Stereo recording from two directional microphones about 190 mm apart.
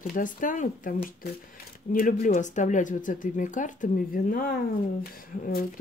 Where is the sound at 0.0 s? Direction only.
45° left (ahead or behind).